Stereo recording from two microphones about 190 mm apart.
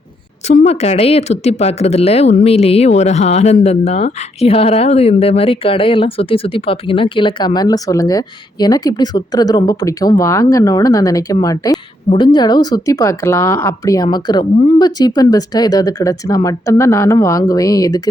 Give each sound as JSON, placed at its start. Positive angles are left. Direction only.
{"t": 0.4, "sound": "speech", "side_deg": 35}